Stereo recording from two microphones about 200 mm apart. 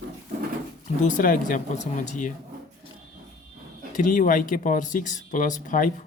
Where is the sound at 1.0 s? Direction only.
40° left (ahead or behind).